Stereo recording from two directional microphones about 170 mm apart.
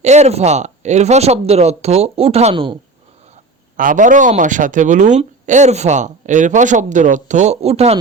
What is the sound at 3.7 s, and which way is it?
Speech, 50° right (ahead or behind).